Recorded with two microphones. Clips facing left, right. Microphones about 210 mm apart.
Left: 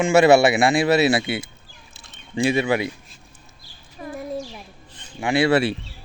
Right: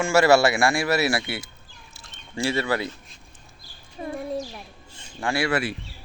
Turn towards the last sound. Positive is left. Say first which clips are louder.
# left 6 dB
turn(degrees=25)  # may be behind; listen again after turning